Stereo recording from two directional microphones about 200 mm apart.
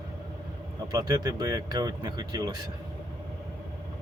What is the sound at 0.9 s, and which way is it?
Speech, 15° right (ahead or behind).